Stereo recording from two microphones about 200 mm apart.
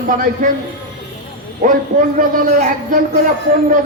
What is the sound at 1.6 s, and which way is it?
A man's voice, 40° right (ahead or behind).